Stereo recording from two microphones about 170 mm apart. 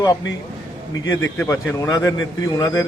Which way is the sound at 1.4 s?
15° left (ahead or behind).